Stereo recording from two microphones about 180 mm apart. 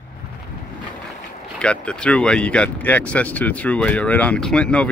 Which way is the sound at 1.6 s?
5° left (ahead or behind).